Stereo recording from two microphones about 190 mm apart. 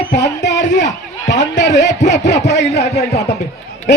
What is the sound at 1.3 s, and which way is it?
Speech, 70° left (ahead or behind).